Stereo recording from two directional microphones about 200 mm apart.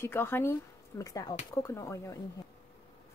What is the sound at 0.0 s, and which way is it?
Speech, 10° left (ahead or behind).